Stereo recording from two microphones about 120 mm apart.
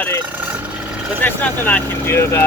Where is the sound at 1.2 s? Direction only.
15° left (ahead or behind).